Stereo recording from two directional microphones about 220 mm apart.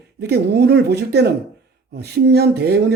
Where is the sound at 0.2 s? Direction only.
50° right (ahead or behind).